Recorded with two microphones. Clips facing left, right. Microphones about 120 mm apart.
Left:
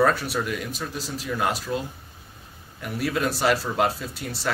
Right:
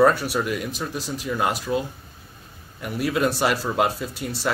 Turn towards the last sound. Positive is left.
turn(degrees=0)  # may be behind; listen again after turning